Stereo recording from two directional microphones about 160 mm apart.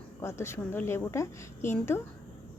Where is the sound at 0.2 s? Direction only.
15° left (ahead or behind).